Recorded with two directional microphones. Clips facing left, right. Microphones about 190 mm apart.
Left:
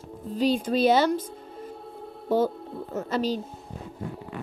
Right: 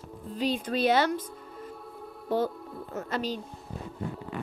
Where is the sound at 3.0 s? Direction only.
35° left (ahead or behind).